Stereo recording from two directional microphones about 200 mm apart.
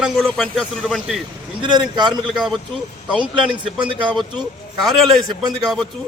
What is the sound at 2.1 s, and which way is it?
Speech, centre (ahead or behind).